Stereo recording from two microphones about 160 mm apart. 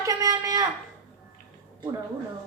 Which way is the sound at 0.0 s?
20° right (ahead or behind).